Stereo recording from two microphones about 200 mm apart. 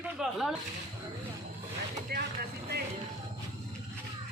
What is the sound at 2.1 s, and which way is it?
Speech, 50° right (ahead or behind).